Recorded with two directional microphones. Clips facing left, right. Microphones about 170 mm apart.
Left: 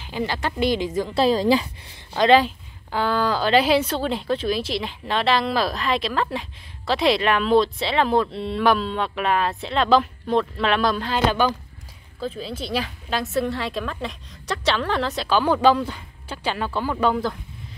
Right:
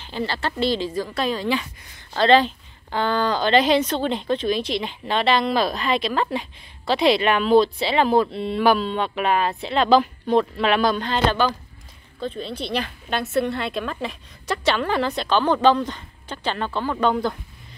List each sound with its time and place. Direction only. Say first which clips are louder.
0.0 s speech: even; 15° left (ahead or behind); by 1.7 s 35° left (ahead or behind)
2.1 s a woman's voice: even; 10° left (ahead or behind)